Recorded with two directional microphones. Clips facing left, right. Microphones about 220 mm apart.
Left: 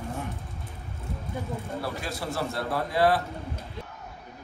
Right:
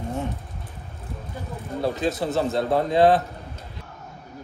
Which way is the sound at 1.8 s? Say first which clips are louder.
Right 14 dB; 25° right (ahead or behind).